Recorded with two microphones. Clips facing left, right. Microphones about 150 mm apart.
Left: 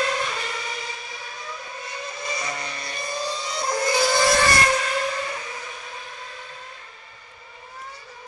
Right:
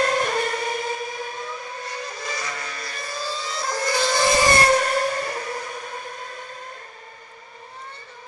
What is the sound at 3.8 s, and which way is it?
Vehicle, 15° left (ahead or behind).